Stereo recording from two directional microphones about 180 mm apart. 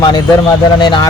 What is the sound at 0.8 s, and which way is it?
Speech, 25° left (ahead or behind).